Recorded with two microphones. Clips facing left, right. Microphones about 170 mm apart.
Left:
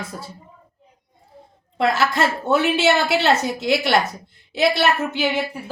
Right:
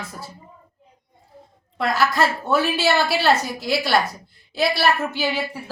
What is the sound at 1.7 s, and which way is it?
A woman's voice, 25° left (ahead or behind).